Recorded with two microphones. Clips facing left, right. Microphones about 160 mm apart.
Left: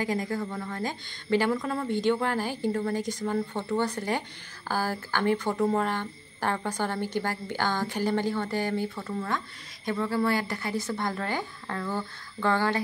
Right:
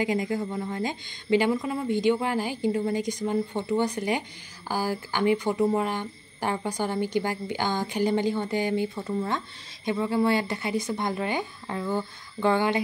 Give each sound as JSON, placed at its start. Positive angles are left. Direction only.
{"t": 0.0, "sound": "a woman's voice", "side_deg": -15}